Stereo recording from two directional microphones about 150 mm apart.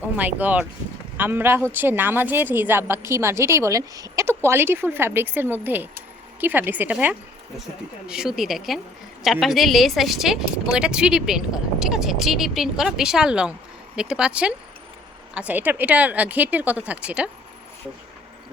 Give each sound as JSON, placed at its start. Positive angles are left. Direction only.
{"t": 0.2, "sound": "a woman's voice", "side_deg": -10}